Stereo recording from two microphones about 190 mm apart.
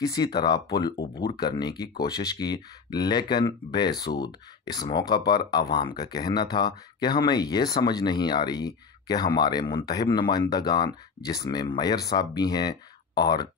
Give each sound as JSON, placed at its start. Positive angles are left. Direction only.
{"t": 0.0, "sound": "speech", "side_deg": 20}